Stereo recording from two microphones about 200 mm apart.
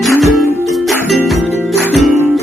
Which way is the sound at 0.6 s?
Centre (ahead or behind).